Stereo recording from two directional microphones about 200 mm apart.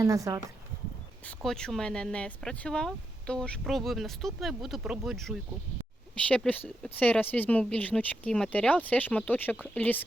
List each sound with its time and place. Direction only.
0.0 s speech: 15° right (ahead or behind)
1.2 s speech: 5° left (ahead or behind)